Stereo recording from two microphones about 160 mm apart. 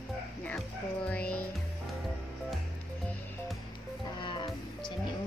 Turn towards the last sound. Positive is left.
turn(degrees=30)  # may be behind; listen again after turning